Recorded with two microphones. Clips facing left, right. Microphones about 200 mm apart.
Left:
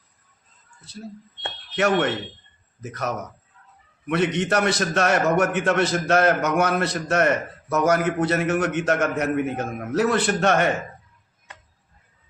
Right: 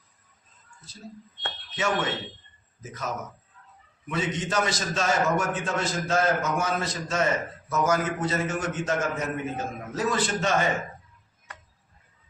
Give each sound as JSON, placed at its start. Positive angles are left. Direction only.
{"t": 0.9, "sound": "a man's voice", "side_deg": 65}